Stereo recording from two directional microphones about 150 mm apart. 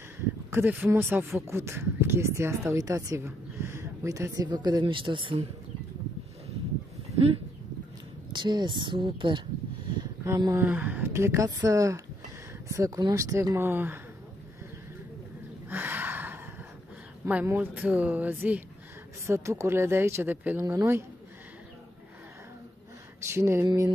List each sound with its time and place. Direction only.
0.2 s speech: 15° right (ahead or behind); by 5.5 s 35° right (ahead or behind)
8.3 s speech: 30° right (ahead or behind)
10.2 s speech: 20° right (ahead or behind)
15.7 s a sound: 15° right (ahead or behind)
17.2 s speech: 10° right (ahead or behind)
23.2 s a sound: 15° right (ahead or behind)